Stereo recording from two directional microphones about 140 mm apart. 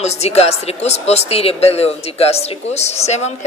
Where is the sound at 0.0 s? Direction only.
50° left (ahead or behind).